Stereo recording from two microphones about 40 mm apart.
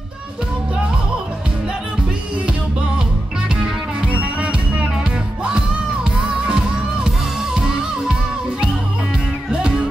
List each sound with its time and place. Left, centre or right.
3.4 s music: right
4.4 s music: right
6.0 s music: centre